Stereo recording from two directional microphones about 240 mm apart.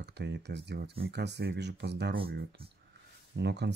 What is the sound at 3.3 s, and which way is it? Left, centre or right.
Speech, right.